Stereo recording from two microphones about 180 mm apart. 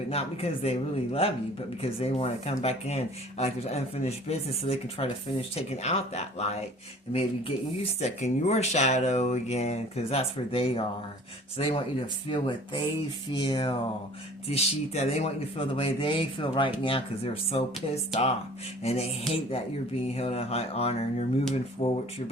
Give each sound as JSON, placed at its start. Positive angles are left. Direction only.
{"t": 0.1, "sound": "speech", "side_deg": 35}
{"t": 20.1, "sound": "speech", "side_deg": 35}